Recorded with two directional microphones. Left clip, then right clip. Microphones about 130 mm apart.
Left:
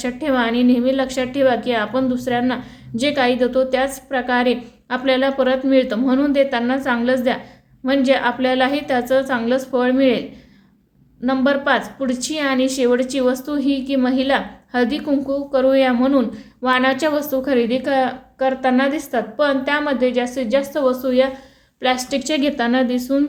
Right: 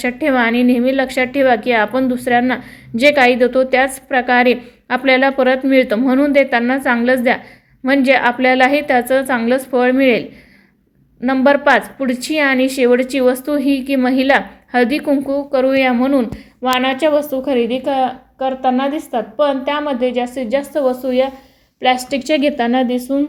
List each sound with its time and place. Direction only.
0.0 s a woman's voice: 45° right (ahead or behind); by 23.2 s 25° right (ahead or behind)